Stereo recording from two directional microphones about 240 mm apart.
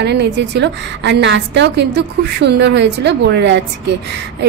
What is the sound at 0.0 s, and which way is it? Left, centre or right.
A woman's voice, right.